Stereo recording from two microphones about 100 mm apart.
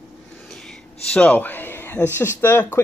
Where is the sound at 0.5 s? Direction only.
5° left (ahead or behind); by 2.0 s 20° left (ahead or behind).